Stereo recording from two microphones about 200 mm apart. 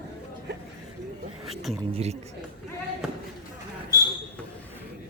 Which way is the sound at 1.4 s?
Centre (ahead or behind).